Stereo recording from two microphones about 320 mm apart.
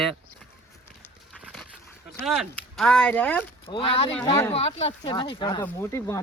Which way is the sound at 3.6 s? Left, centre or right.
Centre.